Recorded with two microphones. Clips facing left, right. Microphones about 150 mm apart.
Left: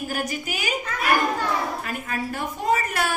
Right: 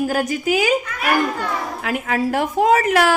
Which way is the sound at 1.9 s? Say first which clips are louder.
Right 8 dB; 90° right.